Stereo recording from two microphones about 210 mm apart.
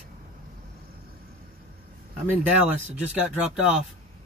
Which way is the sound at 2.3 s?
10° right (ahead or behind).